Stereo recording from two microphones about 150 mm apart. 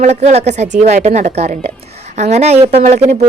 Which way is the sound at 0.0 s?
50° right (ahead or behind).